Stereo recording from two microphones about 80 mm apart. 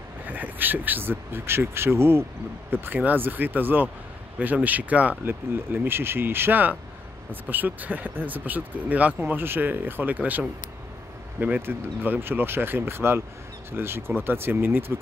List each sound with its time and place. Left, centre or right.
0.2 s speech: right